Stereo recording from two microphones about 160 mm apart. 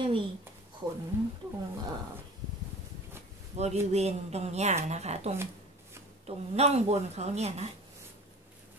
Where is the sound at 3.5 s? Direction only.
45° right (ahead or behind).